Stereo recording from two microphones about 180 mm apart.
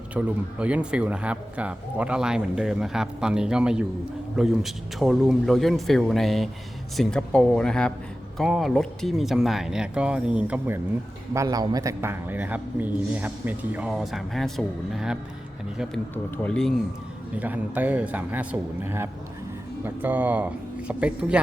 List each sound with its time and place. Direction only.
0.1 s speech: 5° right (ahead or behind)
11.3 s speech: 20° right (ahead or behind); by 16.7 s 5° left (ahead or behind)
17.3 s speech: 10° right (ahead or behind)